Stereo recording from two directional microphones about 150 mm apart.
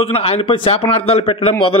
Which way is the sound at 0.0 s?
40° left (ahead or behind).